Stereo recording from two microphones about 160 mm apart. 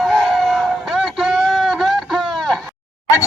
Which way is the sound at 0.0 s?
Centre (ahead or behind).